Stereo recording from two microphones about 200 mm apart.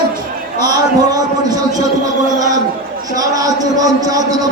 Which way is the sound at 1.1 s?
20° right (ahead or behind).